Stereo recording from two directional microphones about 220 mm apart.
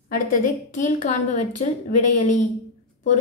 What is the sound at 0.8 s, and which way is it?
A woman's voice, 30° left (ahead or behind).